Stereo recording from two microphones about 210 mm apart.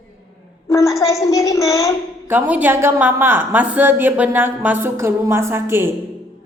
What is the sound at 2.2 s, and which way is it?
A woman's voice, 10° right (ahead or behind).